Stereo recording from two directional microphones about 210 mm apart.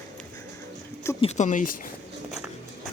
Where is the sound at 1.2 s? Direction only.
35° left (ahead or behind).